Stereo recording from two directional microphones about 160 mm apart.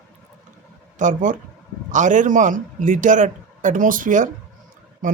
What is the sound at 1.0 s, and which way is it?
A man's voice, 55° right (ahead or behind).